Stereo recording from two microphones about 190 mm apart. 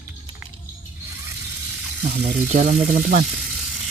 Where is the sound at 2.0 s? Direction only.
55° right (ahead or behind).